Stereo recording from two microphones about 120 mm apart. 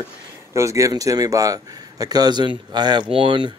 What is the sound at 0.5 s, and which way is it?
Speech, 25° right (ahead or behind).